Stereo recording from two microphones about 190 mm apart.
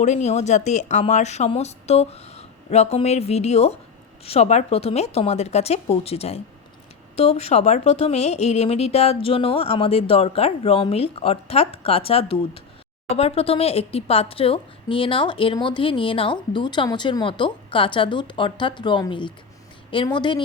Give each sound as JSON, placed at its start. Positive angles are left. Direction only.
{"t": 0.0, "sound": "a woman's voice", "side_deg": 40}